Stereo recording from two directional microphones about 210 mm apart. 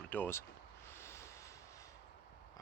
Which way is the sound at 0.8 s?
10° left (ahead or behind).